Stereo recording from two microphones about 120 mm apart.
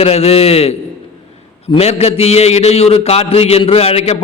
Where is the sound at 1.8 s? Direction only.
60° left (ahead or behind).